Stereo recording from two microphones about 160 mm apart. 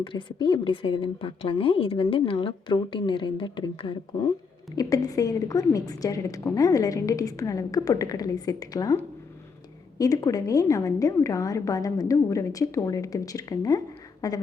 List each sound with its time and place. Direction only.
0.0 s a woman's voice: 30° left (ahead or behind)